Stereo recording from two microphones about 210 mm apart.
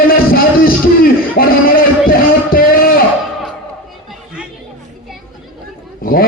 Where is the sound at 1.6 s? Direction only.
45° left (ahead or behind).